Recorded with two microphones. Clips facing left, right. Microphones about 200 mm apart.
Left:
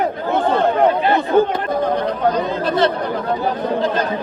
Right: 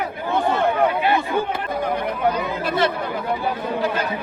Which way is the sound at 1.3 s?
50° left (ahead or behind).